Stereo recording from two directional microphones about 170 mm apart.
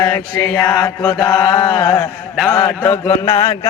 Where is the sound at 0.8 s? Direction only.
20° left (ahead or behind).